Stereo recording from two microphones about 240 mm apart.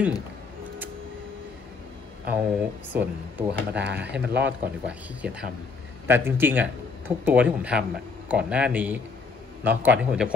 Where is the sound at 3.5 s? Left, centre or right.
Right.